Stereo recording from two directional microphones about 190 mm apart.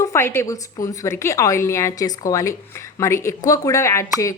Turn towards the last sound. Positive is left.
turn(degrees=15)  # may be behind; listen again after turning